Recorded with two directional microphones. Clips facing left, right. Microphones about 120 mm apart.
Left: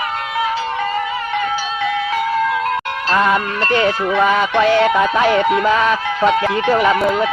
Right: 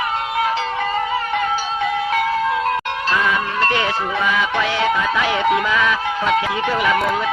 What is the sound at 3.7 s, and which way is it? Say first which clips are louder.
A man's voice: left 4 dB; 40° left (ahead or behind).